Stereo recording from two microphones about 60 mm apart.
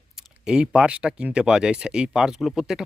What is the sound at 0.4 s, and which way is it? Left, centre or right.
Speech, centre.